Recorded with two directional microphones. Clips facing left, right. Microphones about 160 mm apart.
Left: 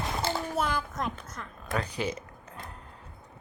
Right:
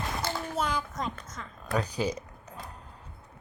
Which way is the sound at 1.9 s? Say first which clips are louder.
Right 2 dB; 35° right (ahead or behind).